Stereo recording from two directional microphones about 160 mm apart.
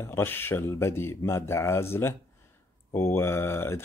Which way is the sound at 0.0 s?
15° left (ahead or behind).